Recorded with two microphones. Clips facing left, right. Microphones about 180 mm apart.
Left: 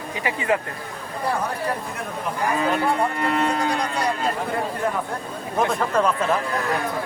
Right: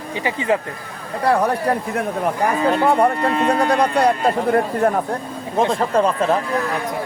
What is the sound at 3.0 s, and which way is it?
Speech, 60° right (ahead or behind).